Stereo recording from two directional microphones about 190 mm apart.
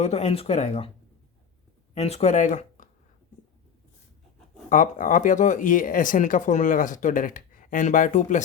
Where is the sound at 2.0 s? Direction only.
35° left (ahead or behind).